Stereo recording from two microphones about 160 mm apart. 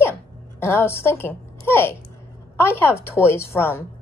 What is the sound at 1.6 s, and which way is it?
Babbling, 15° left (ahead or behind).